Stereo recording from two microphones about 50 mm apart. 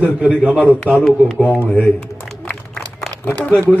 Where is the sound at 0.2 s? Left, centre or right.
Right.